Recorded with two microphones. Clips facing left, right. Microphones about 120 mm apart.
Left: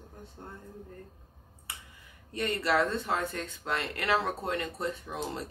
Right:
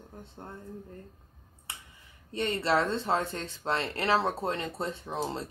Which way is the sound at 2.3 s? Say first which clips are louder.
Right 1 dB; 25° right (ahead or behind).